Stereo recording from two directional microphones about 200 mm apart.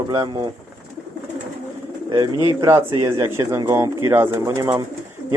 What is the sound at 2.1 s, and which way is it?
Speech, 20° right (ahead or behind).